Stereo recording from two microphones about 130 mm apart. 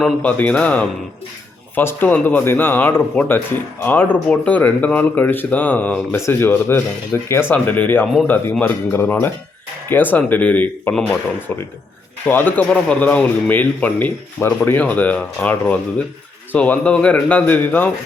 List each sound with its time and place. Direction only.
0.0 s speech: 10° left (ahead or behind)